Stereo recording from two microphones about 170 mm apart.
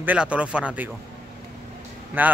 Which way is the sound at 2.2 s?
10° right (ahead or behind).